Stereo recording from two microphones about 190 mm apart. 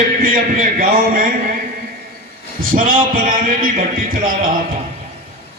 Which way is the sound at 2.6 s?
45° right (ahead or behind).